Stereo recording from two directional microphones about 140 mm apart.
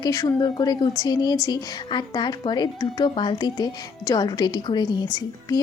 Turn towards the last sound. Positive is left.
turn(degrees=30)  # may be behind; listen again after turning